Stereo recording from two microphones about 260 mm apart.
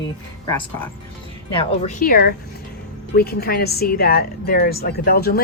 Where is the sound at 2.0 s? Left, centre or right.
Left.